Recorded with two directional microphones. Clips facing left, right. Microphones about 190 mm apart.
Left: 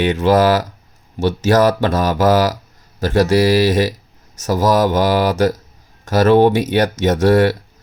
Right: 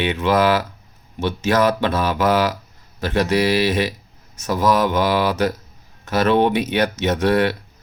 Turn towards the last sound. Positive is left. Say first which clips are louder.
# left 5 dB
turn(degrees=45)  # may be behind; listen again after turning